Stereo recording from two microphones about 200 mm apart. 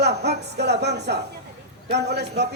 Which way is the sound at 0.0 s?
55° right (ahead or behind).